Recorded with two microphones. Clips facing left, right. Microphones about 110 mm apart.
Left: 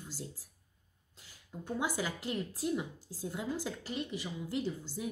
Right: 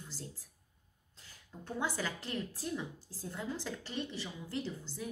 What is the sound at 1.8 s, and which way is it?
A woman's voice, 15° left (ahead or behind).